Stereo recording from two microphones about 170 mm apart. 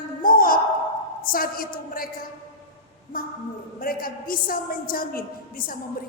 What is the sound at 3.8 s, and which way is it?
A woman's voice, 55° left (ahead or behind).